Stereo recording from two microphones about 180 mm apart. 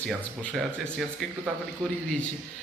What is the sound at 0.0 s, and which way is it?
Speech, 5° left (ahead or behind).